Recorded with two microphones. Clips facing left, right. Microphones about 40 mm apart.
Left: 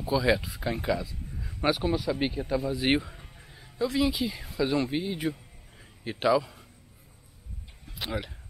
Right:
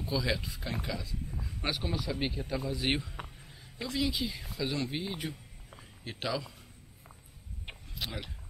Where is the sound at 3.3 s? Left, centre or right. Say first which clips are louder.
Left 2 dB; centre.